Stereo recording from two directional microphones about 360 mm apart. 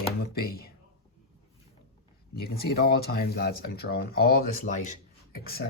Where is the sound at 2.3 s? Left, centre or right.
Left.